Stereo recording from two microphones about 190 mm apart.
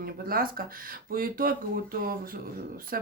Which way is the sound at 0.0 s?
50° right (ahead or behind).